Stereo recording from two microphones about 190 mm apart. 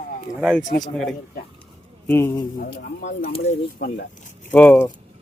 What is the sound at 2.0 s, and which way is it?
Speech, 10° left (ahead or behind).